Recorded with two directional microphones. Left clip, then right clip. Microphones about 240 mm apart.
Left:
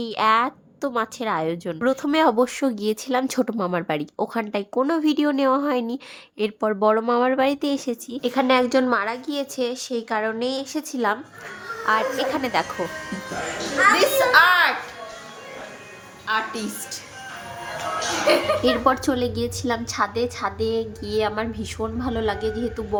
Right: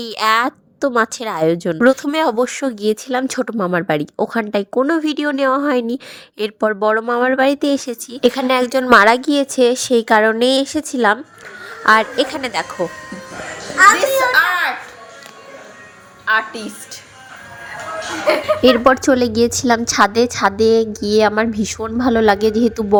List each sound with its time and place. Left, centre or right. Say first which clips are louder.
0.0 s a woman's voice: right 4 dB; right
13.9 s a sound: right 2 dB; centre
16.2 s a woman's voice: right 7 dB; centre
18.6 s a woman's voice: right 8 dB; right